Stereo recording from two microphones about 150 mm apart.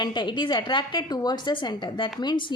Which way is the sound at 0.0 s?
30° left (ahead or behind).